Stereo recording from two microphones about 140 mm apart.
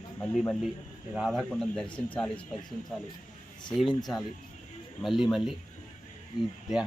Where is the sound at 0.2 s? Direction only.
5° left (ahead or behind).